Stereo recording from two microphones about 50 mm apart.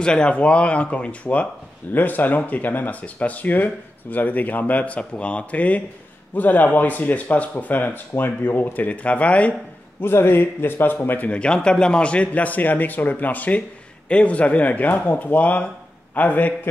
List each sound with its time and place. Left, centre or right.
0.0 s a man's voice: centre
9.9 s a man's voice: left
11.2 s a man's voice: left